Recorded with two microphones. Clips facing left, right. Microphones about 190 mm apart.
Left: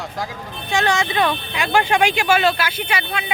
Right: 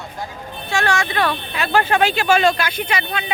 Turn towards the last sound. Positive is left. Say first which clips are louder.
# right 1 dB
turn(degrees=10)  # may be behind; listen again after turning